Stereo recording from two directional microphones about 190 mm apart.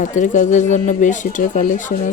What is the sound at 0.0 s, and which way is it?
Speech, 40° left (ahead or behind).